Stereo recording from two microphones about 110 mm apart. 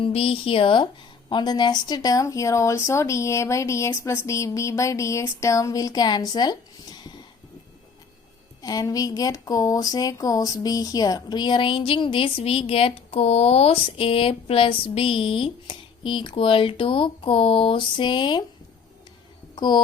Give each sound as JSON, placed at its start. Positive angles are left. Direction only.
{"t": 0.0, "sound": "speech", "side_deg": 60}
{"t": 8.6, "sound": "speech", "side_deg": 35}
{"t": 19.5, "sound": "speech", "side_deg": 45}